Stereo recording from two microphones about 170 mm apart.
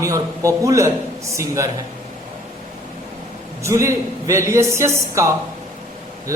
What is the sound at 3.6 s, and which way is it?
A man's voice, 15° right (ahead or behind).